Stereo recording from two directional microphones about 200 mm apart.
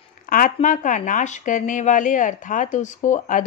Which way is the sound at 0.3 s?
40° left (ahead or behind).